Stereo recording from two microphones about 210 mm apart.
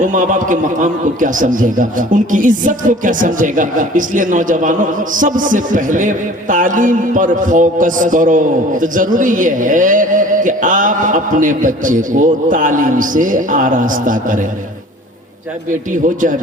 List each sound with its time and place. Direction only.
0.0 s a man's voice: 40° right (ahead or behind)
15.9 s a man's voice: 40° right (ahead or behind)